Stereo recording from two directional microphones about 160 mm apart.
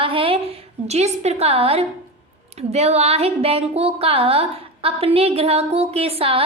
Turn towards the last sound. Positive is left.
turn(degrees=-35)  # may be behind; listen again after turning